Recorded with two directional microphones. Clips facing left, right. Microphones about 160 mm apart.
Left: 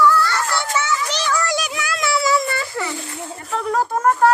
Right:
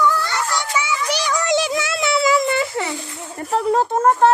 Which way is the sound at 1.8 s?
25° right (ahead or behind).